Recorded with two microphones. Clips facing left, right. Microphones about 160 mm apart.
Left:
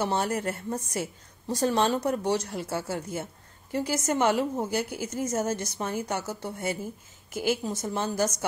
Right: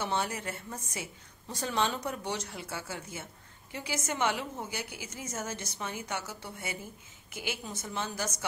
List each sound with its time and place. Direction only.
0.0 s a woman's voice: 40° left (ahead or behind)